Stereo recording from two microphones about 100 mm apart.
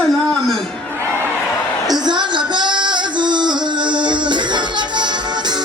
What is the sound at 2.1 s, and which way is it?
Music, 50° right (ahead or behind).